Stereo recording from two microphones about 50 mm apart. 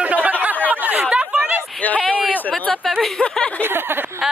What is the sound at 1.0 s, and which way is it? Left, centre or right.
Chatter, right.